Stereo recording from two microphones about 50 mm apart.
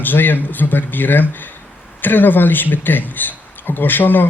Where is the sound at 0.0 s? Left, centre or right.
Left.